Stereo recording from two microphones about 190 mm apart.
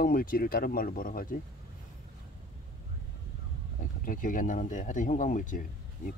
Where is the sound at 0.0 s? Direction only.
50° left (ahead or behind).